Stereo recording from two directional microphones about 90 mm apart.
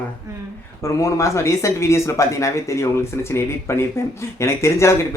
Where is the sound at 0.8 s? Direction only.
35° left (ahead or behind).